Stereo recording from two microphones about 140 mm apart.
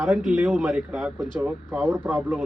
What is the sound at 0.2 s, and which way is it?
Speech, 10° right (ahead or behind).